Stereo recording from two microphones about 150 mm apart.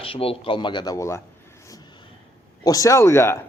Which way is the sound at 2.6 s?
25° left (ahead or behind).